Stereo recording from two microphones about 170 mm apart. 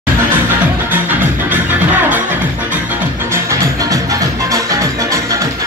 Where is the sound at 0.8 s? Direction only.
10° right (ahead or behind).